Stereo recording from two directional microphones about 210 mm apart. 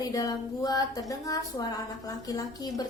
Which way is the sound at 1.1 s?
15° left (ahead or behind).